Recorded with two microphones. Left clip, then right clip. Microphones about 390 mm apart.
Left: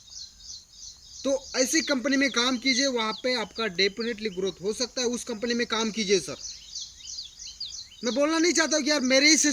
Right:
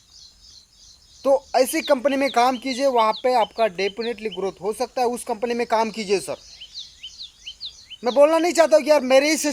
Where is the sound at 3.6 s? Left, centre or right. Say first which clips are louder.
Right 4 dB; centre.